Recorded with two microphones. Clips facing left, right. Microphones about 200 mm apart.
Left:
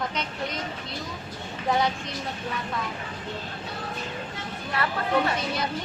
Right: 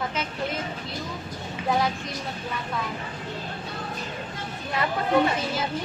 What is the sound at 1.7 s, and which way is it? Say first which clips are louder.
Speech: even; centre (ahead or behind).